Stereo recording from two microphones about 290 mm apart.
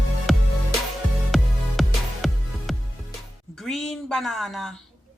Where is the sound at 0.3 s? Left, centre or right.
Centre.